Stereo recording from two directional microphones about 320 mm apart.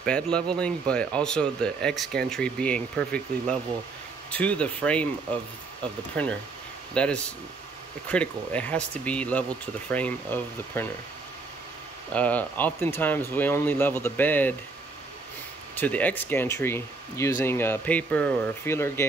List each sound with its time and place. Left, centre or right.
0.0 s speech: centre
6.9 s speech: centre
12.1 s speech: centre
15.8 s speech: centre